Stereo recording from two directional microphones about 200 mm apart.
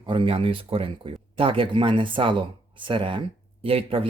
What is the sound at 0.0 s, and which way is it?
Speech, 25° right (ahead or behind).